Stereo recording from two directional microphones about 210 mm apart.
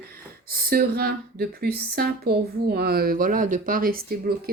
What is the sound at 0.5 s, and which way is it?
Speech, 45° right (ahead or behind).